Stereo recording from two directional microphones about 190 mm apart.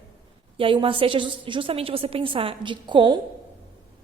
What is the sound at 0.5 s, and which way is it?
A woman's voice, 30° right (ahead or behind).